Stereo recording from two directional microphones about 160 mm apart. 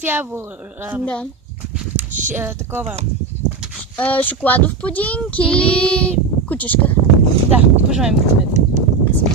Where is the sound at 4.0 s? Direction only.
10° left (ahead or behind).